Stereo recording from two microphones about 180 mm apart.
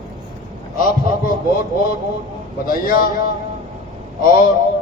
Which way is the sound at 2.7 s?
55° left (ahead or behind).